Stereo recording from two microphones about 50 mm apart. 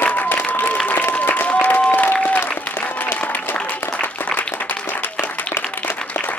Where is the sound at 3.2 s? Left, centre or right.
Left.